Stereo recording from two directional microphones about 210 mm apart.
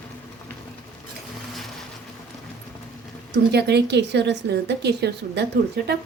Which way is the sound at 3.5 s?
50° right (ahead or behind).